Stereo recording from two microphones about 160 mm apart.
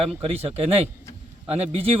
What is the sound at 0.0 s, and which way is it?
Speech, 35° right (ahead or behind).